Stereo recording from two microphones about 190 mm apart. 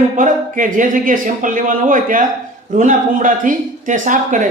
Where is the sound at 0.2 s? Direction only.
45° right (ahead or behind).